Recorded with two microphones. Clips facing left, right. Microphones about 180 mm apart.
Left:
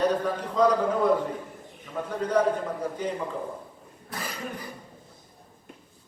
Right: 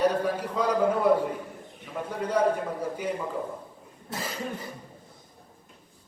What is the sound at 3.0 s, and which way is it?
Speech, 10° right (ahead or behind).